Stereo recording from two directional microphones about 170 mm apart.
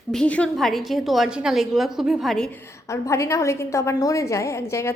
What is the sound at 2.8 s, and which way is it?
A woman's voice, 15° left (ahead or behind).